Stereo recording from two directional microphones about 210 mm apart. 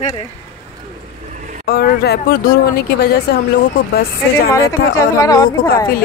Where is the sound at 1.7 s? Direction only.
45° left (ahead or behind).